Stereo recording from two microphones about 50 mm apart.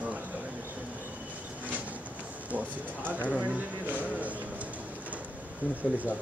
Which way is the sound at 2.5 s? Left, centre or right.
Right.